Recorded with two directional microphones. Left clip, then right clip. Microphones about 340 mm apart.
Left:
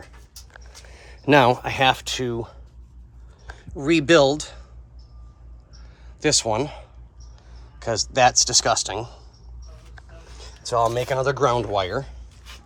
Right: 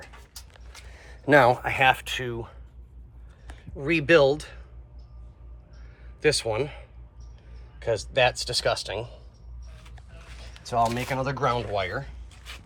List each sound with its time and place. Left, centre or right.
0.9 s speech: left
3.8 s speech: centre
6.1 s speech: centre
10.4 s speech: centre